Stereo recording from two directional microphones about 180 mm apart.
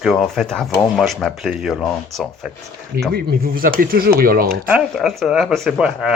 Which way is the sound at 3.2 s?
55° right (ahead or behind).